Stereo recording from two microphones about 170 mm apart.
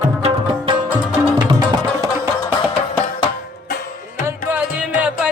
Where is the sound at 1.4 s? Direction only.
25° right (ahead or behind).